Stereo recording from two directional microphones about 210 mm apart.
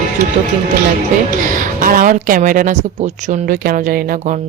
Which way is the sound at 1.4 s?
40° right (ahead or behind).